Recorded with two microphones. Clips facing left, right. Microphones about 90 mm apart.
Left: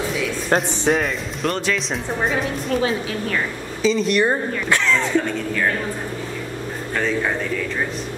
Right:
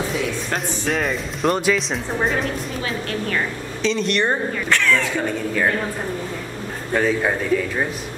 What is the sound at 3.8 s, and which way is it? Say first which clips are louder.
Speech: left 3 dB; 5° left (ahead or behind).